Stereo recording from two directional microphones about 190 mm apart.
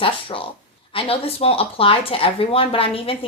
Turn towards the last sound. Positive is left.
turn(degrees=30)  # may be behind; listen again after turning